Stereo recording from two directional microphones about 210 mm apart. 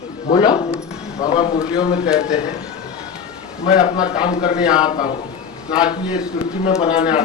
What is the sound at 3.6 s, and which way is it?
A man's voice, 25° left (ahead or behind).